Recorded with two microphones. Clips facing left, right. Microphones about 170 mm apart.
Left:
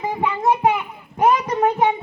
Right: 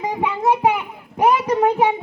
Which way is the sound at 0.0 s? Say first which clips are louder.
Even; 10° right (ahead or behind).